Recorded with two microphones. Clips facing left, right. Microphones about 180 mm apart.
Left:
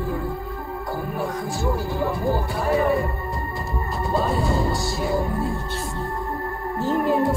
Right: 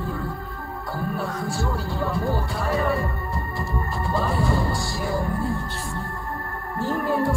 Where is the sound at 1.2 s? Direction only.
15° left (ahead or behind).